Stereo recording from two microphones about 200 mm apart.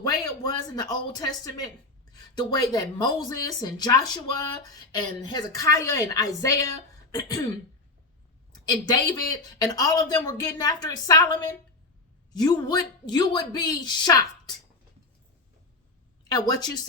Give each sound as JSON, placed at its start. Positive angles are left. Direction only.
{"t": 0.0, "sound": "a woman's voice", "side_deg": 20}
{"t": 8.6, "sound": "speech", "side_deg": 20}
{"t": 16.3, "sound": "speech", "side_deg": 20}